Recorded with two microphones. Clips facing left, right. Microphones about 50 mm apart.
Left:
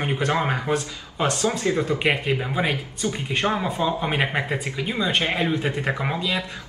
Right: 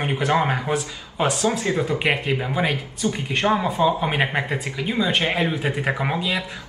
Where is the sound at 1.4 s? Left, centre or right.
Right.